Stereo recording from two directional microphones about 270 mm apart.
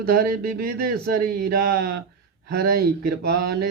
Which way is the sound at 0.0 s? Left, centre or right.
Right.